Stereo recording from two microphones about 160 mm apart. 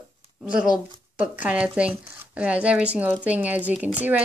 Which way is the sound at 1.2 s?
10° right (ahead or behind).